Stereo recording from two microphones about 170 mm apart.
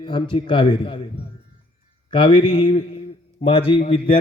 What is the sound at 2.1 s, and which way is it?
A man's voice, 30° left (ahead or behind).